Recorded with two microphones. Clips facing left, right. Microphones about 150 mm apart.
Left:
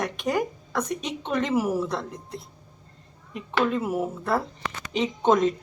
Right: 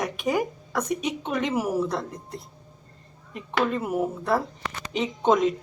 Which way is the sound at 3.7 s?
Centre (ahead or behind).